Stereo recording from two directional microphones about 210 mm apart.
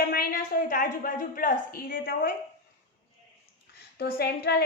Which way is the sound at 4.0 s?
50° left (ahead or behind).